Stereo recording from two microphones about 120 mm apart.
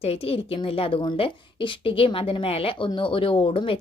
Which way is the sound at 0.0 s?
55° left (ahead or behind).